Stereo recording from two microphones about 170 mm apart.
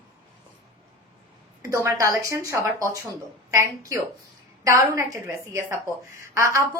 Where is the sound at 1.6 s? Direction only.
15° right (ahead or behind).